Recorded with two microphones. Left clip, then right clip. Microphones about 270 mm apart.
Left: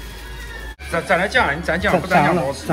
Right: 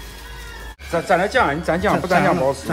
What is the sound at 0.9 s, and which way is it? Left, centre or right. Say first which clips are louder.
Speech: even; right.